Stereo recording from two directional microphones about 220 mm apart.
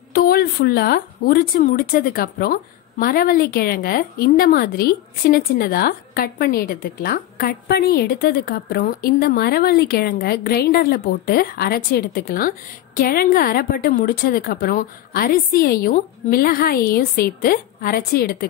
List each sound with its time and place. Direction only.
0.1 s speech: 45° left (ahead or behind)